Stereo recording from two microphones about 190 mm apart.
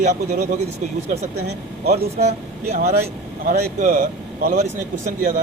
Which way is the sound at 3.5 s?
55° right (ahead or behind).